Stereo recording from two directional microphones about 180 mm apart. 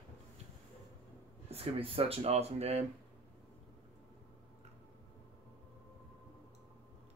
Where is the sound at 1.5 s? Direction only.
35° right (ahead or behind).